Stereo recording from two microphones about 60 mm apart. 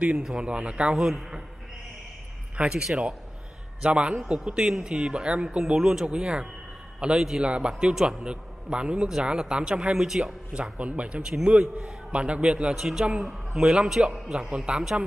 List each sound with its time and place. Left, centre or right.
0.4 s a man's voice: centre
2.5 s speech: right
3.8 s a man's voice: centre
10.5 s a man's voice: centre